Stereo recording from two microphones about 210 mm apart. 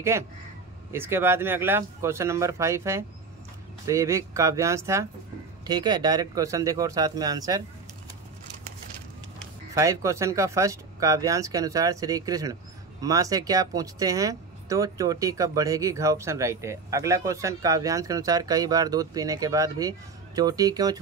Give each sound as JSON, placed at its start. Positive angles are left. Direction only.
{"t": 0.1, "sound": "speech", "side_deg": -10}
{"t": 9.8, "sound": "speech", "side_deg": -15}